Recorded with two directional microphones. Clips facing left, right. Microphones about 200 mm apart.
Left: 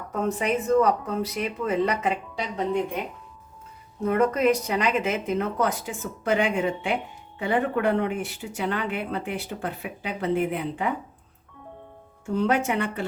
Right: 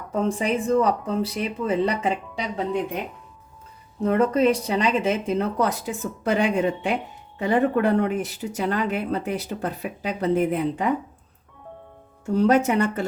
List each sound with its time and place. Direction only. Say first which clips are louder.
0.1 s speech: right 2 dB; 30° right (ahead or behind)
4.1 s speech: right 2 dB; 30° right (ahead or behind)
12.2 s speech: right 5 dB; 40° right (ahead or behind)